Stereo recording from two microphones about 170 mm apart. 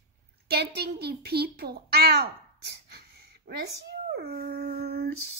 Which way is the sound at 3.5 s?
65° right (ahead or behind).